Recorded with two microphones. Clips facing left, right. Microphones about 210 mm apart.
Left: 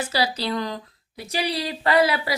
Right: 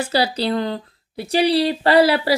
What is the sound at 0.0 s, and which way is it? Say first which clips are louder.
Speech: right 5 dB; 30° right (ahead or behind).